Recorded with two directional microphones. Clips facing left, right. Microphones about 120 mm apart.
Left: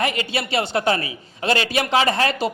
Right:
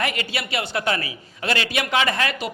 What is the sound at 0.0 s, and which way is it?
Speech, 25° left (ahead or behind).